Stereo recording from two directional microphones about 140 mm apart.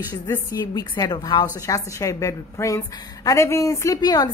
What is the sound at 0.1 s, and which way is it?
A woman's voice, 25° left (ahead or behind).